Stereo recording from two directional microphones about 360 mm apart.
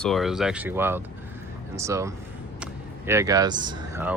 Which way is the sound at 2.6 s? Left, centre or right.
Centre.